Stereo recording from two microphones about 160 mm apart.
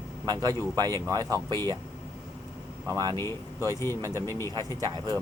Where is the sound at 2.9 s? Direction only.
25° right (ahead or behind).